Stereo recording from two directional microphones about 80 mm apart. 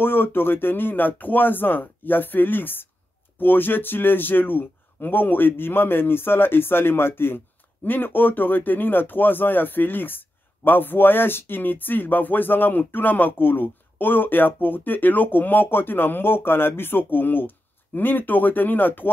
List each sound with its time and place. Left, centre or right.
0.0 s speech: left